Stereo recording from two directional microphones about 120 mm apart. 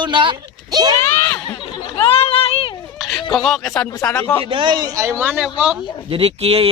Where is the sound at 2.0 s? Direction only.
55° left (ahead or behind).